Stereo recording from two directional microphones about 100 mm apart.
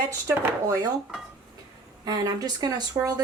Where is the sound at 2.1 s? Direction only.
40° right (ahead or behind).